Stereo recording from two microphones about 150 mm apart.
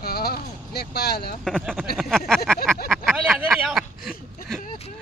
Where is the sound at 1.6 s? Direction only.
5° right (ahead or behind).